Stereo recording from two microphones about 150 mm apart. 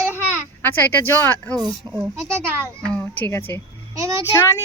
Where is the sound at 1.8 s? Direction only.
30° right (ahead or behind).